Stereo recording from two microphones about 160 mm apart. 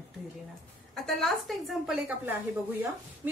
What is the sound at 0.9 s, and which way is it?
Speech, centre (ahead or behind).